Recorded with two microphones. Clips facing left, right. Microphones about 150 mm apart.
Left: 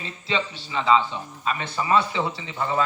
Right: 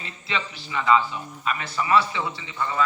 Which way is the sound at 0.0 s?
25° left (ahead or behind).